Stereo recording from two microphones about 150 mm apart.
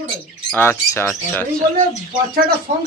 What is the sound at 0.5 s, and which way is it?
Speech, 15° left (ahead or behind).